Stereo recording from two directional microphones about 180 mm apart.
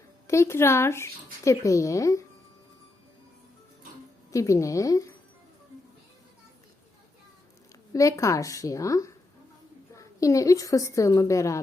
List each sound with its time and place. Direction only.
0.3 s speech: 15° left (ahead or behind)
4.3 s speech: 15° left (ahead or behind)
7.9 s a woman's voice: 15° left (ahead or behind)